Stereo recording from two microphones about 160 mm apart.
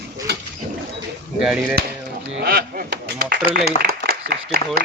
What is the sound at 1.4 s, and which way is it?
Speech, 5° right (ahead or behind).